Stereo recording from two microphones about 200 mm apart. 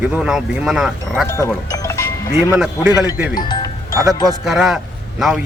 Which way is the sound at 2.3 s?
5° right (ahead or behind).